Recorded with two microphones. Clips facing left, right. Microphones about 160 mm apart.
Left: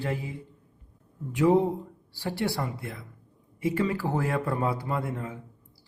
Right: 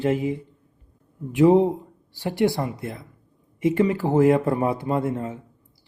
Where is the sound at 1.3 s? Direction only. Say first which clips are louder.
Right 6 dB; 20° right (ahead or behind).